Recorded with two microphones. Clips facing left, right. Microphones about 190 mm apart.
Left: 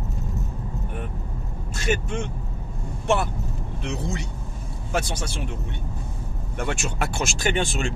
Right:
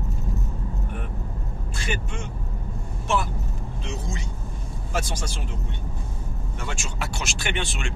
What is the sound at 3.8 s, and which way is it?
Speech, 65° left (ahead or behind).